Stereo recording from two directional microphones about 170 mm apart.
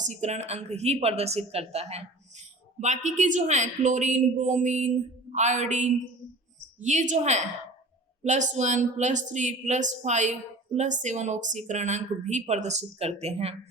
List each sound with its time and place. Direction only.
0.0 s speech: 45° right (ahead or behind)